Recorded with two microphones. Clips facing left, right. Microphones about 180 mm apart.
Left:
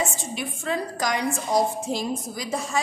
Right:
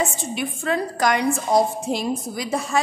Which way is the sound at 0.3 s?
65° right (ahead or behind).